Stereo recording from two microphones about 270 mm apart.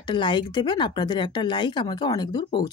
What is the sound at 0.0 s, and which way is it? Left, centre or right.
Speech, centre.